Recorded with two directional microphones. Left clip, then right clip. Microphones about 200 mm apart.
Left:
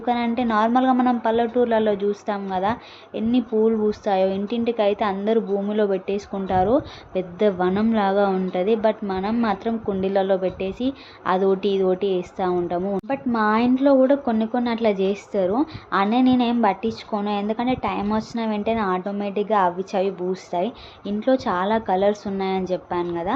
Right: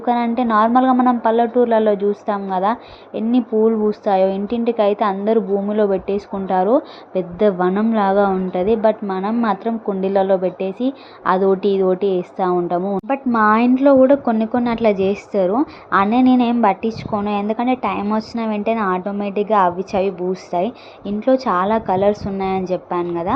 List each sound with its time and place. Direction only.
0.0 s a woman's voice: 15° right (ahead or behind)